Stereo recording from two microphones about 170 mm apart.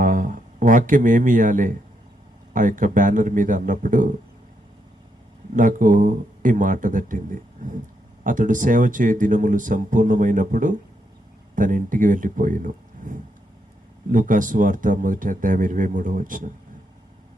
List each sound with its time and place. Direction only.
0.0 s speech: 50° right (ahead or behind)
5.5 s speech: 50° right (ahead or behind)